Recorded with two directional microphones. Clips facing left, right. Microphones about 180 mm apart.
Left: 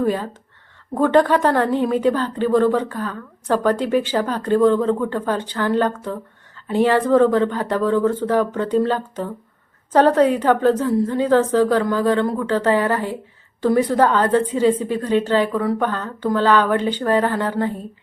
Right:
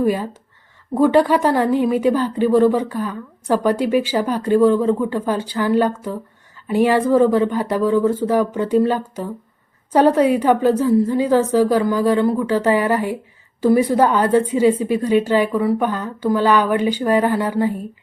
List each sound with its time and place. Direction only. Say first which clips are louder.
0.0 s a woman's voice: right 2 dB; 10° right (ahead or behind)